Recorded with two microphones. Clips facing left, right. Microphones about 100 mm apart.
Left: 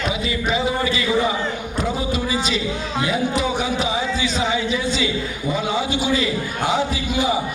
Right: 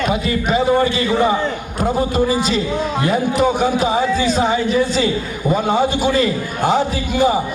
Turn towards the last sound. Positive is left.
turn(degrees=-45)  # may be behind; listen again after turning